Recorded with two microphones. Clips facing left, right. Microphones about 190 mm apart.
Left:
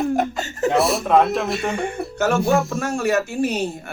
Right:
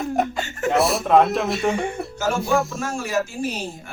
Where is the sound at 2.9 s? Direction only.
65° left (ahead or behind).